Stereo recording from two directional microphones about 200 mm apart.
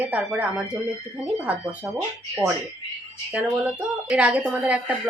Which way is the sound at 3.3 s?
5° right (ahead or behind).